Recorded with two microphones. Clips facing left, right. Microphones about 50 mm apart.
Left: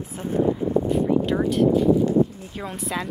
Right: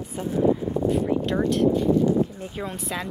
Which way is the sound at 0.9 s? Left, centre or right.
Centre.